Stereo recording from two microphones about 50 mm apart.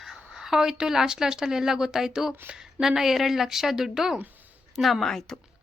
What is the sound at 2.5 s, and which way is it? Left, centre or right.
Speech, right.